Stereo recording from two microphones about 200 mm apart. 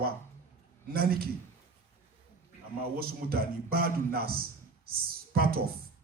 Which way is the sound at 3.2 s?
50° right (ahead or behind).